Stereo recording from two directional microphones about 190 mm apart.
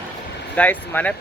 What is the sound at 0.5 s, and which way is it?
Speech, 10° left (ahead or behind).